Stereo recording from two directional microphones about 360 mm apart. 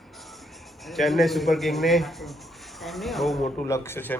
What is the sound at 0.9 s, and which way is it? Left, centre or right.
A man's voice, centre.